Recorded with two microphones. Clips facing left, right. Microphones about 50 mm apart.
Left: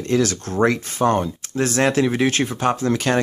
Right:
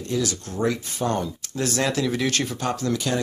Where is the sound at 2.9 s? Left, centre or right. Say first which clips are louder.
Left 5 dB; left.